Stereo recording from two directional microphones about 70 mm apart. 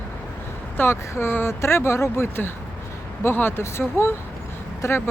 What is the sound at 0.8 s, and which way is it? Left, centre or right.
Speech, left.